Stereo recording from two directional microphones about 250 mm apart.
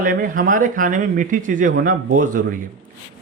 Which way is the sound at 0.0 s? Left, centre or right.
Right.